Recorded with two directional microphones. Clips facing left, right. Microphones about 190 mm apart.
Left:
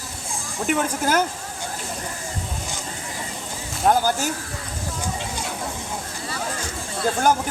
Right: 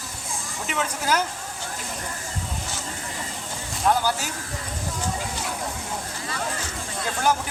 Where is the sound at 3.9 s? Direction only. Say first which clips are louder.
Left 3 dB; 45° left (ahead or behind).